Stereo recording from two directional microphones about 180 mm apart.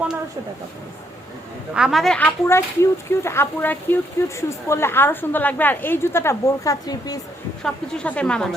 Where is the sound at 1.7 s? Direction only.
5° right (ahead or behind); by 7.2 s 20° left (ahead or behind).